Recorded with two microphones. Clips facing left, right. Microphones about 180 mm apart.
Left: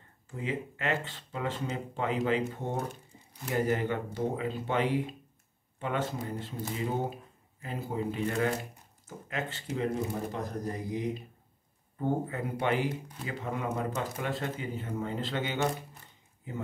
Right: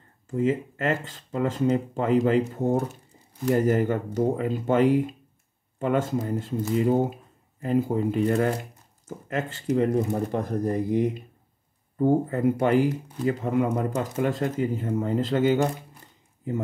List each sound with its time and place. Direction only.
0.3 s speech: 45° right (ahead or behind)
8.3 s speech: 35° right (ahead or behind)
9.0 s speech: 45° right (ahead or behind)